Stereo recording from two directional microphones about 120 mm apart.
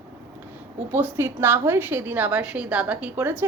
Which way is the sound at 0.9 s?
20° right (ahead or behind).